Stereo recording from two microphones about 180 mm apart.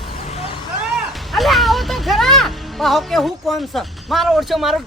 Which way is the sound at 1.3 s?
Centre (ahead or behind).